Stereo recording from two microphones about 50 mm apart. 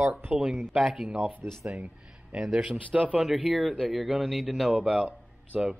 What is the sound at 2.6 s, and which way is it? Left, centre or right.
Speech, right.